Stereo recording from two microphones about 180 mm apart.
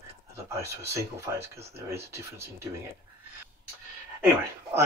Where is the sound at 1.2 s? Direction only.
15° right (ahead or behind).